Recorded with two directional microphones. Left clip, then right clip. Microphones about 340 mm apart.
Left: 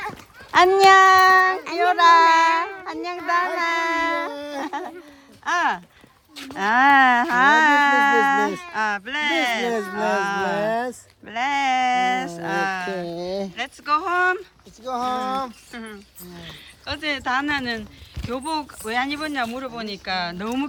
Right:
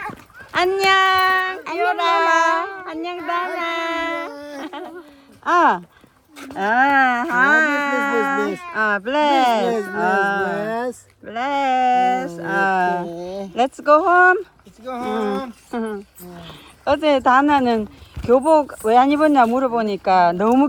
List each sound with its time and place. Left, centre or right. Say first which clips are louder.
0.5 s child singing: left 3 dB; centre
5.5 s speech: right 6 dB; centre
13.1 s a sound: left 1 dB; left
13.6 s speech: right 10 dB; centre
16.5 s speech: right 12 dB; centre